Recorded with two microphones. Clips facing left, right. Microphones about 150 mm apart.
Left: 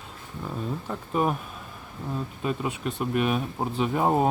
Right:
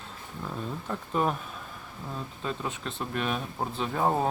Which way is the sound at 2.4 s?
10° left (ahead or behind).